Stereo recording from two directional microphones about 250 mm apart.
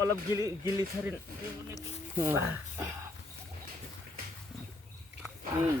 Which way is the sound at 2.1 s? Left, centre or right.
Centre.